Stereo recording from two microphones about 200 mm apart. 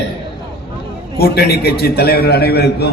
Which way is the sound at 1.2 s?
50° left (ahead or behind).